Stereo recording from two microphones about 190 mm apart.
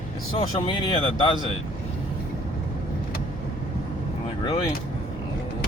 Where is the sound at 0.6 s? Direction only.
30° left (ahead or behind).